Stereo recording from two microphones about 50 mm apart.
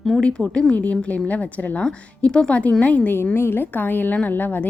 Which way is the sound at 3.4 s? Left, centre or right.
Left.